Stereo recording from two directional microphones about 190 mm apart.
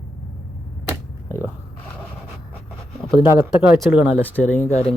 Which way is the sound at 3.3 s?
10° right (ahead or behind).